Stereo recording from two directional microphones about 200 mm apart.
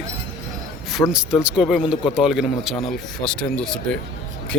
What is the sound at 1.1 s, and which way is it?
Speech, 5° right (ahead or behind).